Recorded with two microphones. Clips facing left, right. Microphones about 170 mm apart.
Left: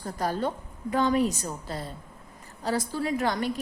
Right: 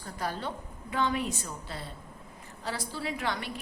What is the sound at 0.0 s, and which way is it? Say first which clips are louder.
A woman's voice: left 6 dB; 40° left (ahead or behind).